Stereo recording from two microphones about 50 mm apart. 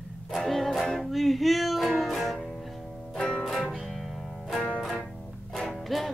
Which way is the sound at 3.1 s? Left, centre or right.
Centre.